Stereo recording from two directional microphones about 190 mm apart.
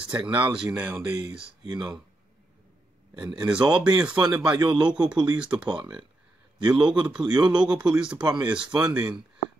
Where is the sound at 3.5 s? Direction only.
25° right (ahead or behind).